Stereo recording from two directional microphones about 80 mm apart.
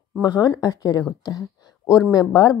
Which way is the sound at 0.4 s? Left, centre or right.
Left.